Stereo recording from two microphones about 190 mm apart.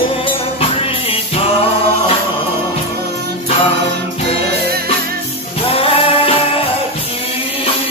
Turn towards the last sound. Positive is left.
turn(degrees=30)  # may be behind; listen again after turning